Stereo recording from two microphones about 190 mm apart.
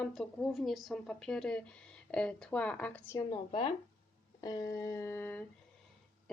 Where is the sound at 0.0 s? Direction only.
Centre (ahead or behind).